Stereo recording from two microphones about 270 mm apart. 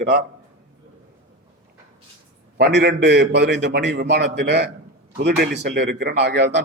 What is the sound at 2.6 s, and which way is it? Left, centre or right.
A man's voice, right.